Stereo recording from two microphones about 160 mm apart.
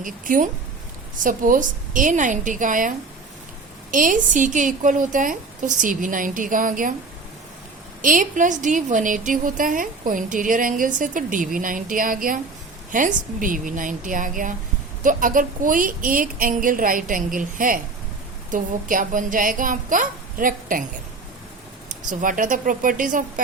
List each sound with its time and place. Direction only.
0.0 s a woman's voice: 55° right (ahead or behind)
3.9 s a woman's voice: 55° right (ahead or behind)
8.0 s a woman's voice: 55° right (ahead or behind)
21.8 s a woman's voice: 55° right (ahead or behind)